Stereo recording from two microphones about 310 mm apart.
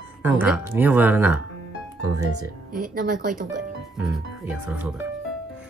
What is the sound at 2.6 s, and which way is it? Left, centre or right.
Speech, right.